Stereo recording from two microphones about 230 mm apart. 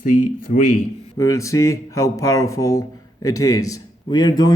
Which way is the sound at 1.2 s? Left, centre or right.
Centre.